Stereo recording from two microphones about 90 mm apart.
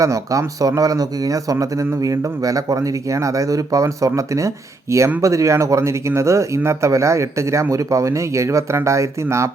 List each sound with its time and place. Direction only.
0.0 s speech: 35° right (ahead or behind)